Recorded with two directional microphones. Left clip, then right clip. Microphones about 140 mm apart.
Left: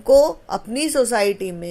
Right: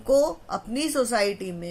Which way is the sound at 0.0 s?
40° left (ahead or behind).